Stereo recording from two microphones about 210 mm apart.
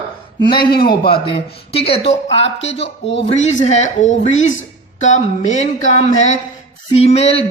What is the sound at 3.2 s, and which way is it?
Speech, 35° left (ahead or behind).